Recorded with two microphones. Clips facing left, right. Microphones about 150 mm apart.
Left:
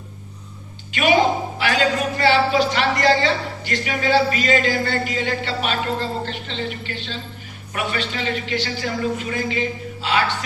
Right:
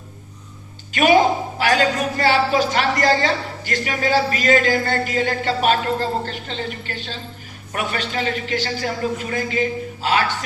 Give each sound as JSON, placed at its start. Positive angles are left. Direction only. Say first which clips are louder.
{"t": 0.9, "sound": "speech", "louder": "right 2 dB", "side_deg": -45}